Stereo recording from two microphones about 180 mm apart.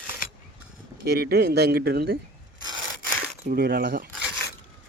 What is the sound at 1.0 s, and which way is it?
Speech, 60° right (ahead or behind).